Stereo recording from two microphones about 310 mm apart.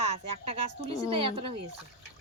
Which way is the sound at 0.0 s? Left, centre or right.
Centre.